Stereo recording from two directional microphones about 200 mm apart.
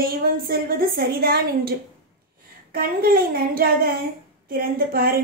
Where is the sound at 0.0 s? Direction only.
50° right (ahead or behind).